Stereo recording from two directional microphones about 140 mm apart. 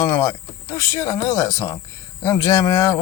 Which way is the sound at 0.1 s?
25° left (ahead or behind).